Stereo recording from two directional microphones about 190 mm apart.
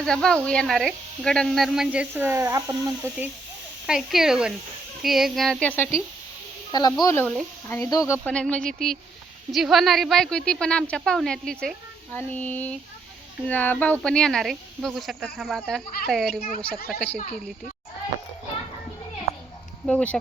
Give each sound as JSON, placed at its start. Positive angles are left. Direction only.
{"t": 0.0, "sound": "speech", "side_deg": 5}
{"t": 3.8, "sound": "speech", "side_deg": -5}
{"t": 6.7, "sound": "speech", "side_deg": 20}
{"t": 19.8, "sound": "speech", "side_deg": 5}